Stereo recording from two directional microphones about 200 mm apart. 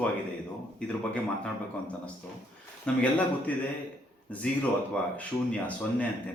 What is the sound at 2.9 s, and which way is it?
Speech, 5° left (ahead or behind).